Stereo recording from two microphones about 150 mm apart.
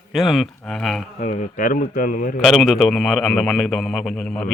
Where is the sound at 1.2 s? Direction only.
50° left (ahead or behind); by 2.4 s 70° left (ahead or behind).